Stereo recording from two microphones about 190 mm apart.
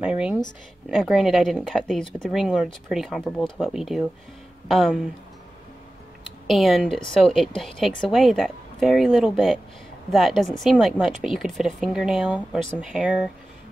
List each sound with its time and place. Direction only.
0.0 s a woman's voice: 5° right (ahead or behind)
6.4 s a woman's voice: centre (ahead or behind)